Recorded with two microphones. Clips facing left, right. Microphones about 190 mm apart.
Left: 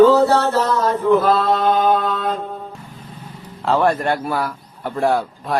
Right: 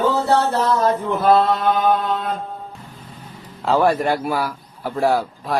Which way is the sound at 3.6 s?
Centre (ahead or behind).